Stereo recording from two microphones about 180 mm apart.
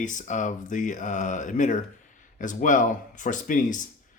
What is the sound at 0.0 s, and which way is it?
Speech, 45° left (ahead or behind).